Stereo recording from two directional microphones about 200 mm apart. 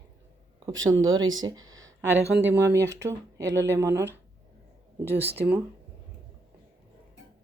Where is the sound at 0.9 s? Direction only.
80° right.